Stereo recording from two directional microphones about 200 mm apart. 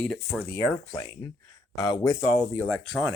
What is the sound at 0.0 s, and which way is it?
Speech, 5° left (ahead or behind).